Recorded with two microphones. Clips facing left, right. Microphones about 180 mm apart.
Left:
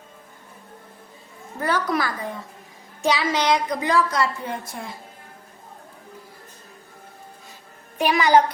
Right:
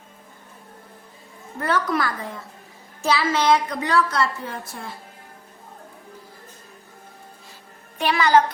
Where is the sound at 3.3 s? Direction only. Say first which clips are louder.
Right 2 dB; 15° left (ahead or behind).